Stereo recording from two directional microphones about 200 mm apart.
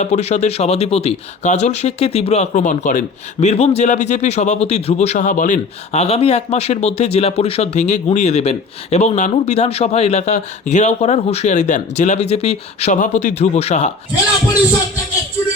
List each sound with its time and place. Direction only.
0.0 s a man's voice: 35° left (ahead or behind)